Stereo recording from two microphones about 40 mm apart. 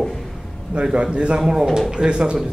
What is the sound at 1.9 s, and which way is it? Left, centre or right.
Speech, right.